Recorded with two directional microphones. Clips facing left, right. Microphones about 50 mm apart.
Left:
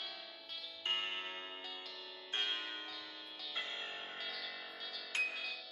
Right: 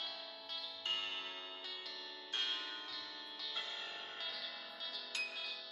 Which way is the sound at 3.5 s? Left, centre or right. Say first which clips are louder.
Left 4 dB; left.